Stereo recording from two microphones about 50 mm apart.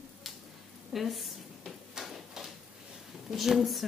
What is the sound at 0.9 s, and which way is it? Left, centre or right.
Drawer open or close, centre.